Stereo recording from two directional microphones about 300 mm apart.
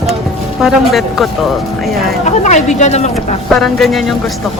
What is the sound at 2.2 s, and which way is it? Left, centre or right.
Speech, left.